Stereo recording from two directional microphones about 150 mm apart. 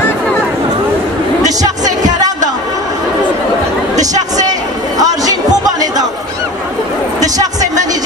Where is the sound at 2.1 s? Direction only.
25° right (ahead or behind).